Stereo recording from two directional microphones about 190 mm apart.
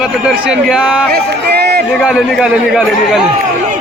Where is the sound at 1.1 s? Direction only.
60° right (ahead or behind).